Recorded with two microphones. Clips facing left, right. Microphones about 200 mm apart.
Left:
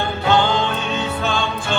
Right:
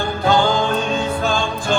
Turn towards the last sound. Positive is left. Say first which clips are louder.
# right 1 dB
turn(degrees=-40)  # may be behind; listen again after turning